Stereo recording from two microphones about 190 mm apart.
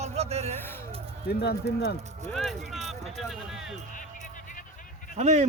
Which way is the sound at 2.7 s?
35° right (ahead or behind).